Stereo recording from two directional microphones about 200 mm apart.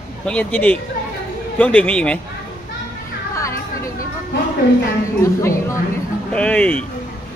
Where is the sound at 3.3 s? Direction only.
15° left (ahead or behind).